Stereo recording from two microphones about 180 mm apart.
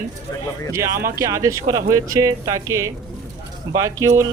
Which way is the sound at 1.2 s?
15° right (ahead or behind).